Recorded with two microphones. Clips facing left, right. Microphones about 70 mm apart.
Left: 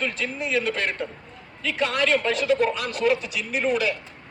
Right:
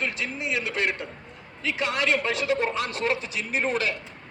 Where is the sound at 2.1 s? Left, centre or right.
Centre.